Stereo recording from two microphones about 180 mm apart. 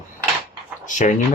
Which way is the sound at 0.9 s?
45° left (ahead or behind).